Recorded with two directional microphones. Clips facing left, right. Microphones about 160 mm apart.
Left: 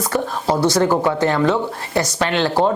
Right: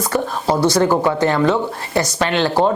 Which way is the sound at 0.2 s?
25° right (ahead or behind).